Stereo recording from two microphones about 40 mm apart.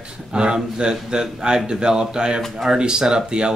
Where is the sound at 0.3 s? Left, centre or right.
Right.